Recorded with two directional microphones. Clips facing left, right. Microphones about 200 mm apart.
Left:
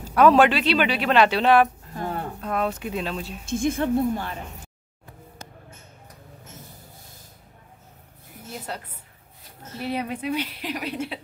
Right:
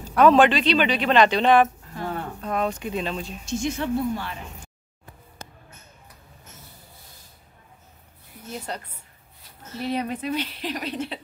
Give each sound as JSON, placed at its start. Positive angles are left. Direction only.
{"t": 0.2, "sound": "speech", "side_deg": 5}
{"t": 3.4, "sound": "a woman's voice", "side_deg": 55}
{"t": 8.5, "sound": "speech", "side_deg": 5}